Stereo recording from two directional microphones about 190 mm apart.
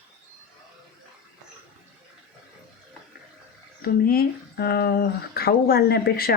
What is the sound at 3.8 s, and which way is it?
Speech, 50° left (ahead or behind).